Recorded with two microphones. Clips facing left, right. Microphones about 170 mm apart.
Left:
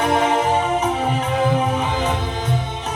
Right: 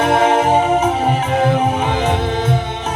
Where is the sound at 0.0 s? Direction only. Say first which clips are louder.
Right 4 dB; 75° right (ahead or behind).